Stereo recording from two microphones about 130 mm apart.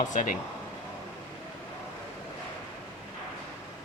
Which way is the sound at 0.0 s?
75° left (ahead or behind).